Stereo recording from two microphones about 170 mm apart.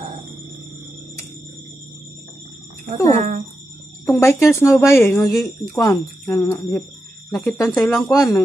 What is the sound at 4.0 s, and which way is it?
Speech, 15° left (ahead or behind).